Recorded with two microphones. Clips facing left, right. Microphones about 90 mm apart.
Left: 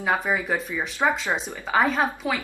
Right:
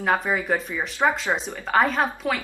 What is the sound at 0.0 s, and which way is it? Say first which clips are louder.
A woman's voice: right 1 dB; 5° left (ahead or behind).